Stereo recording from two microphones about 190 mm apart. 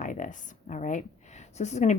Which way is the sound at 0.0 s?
45° left (ahead or behind).